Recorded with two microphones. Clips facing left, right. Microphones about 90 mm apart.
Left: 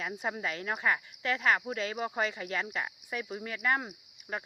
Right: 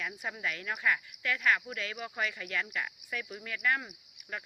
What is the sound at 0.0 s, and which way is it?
Speech, 30° left (ahead or behind).